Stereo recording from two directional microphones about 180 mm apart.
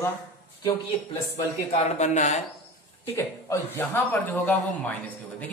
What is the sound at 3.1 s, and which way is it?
A man's voice, 15° left (ahead or behind).